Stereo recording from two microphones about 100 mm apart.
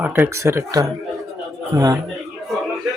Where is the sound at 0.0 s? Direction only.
20° right (ahead or behind); by 2.0 s 40° right (ahead or behind).